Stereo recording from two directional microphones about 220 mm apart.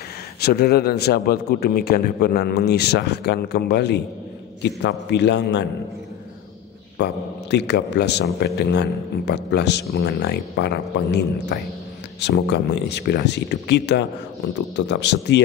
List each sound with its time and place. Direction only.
0.4 s speech: 45° left (ahead or behind)
7.0 s speech: 50° left (ahead or behind)